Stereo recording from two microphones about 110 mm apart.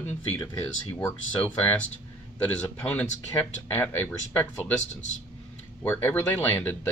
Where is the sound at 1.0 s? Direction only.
15° left (ahead or behind).